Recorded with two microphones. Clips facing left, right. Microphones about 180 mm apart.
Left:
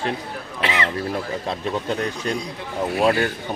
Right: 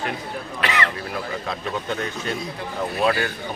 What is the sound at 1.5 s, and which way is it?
Speech, 35° left (ahead or behind).